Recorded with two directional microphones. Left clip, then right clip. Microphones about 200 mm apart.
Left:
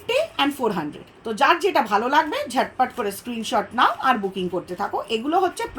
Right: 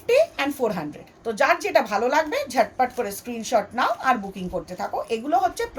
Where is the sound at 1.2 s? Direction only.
20° right (ahead or behind).